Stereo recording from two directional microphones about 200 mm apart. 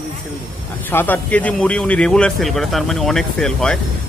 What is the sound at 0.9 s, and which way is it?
Speech, 10° left (ahead or behind).